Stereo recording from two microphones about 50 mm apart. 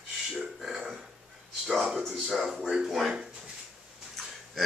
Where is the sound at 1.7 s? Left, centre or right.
Centre.